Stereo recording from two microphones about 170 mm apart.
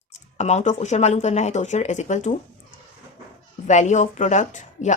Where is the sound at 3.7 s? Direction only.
45° left (ahead or behind).